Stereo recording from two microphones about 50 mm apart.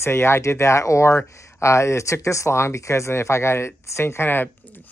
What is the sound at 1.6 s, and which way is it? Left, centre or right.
Speech, left.